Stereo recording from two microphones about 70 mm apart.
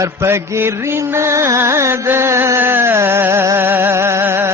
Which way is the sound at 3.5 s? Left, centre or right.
Right.